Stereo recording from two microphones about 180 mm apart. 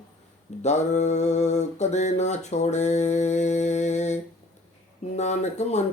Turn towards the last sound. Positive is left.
turn(degrees=40)  # may be behind; listen again after turning